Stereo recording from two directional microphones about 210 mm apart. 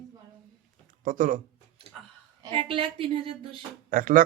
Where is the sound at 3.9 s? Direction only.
40° right (ahead or behind).